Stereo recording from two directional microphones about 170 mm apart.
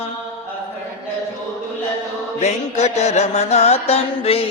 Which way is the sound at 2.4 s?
40° left (ahead or behind).